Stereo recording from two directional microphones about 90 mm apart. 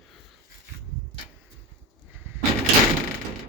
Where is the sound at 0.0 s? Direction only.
Centre (ahead or behind).